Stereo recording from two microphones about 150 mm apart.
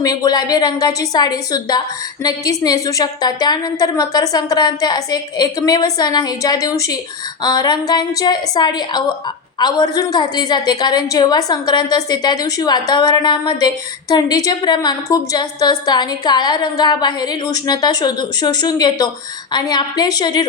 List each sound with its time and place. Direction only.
0.0 s a woman's voice: 25° left (ahead or behind)